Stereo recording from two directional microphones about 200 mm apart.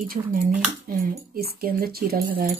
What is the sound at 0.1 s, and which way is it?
Speech, 45° right (ahead or behind).